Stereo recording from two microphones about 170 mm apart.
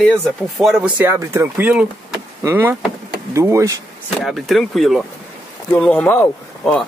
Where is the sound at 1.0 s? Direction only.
15° right (ahead or behind).